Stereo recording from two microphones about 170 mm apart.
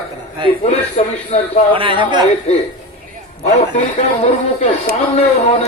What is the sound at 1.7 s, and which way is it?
Speech, 30° right (ahead or behind).